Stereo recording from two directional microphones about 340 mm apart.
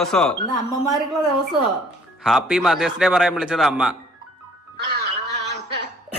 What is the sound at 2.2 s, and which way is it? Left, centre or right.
A man's voice, centre.